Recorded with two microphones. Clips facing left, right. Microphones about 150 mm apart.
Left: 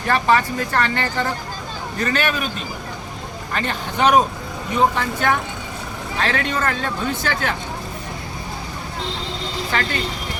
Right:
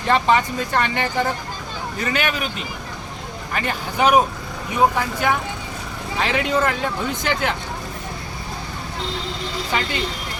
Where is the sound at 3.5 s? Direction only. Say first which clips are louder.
Even; 10° right (ahead or behind).